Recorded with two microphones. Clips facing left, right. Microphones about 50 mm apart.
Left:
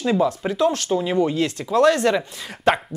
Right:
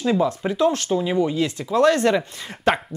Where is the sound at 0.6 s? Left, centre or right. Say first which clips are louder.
Right 1 dB; right.